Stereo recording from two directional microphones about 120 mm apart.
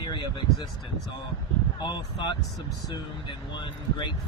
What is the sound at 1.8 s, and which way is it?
Speech, 40° left (ahead or behind).